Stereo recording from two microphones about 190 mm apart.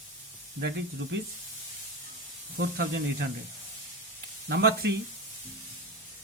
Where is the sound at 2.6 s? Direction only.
65° right (ahead or behind).